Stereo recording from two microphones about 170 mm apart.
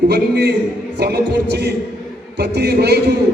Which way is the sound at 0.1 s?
70° right (ahead or behind).